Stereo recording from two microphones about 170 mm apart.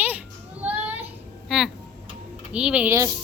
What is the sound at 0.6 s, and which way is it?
Child singing, 10° right (ahead or behind).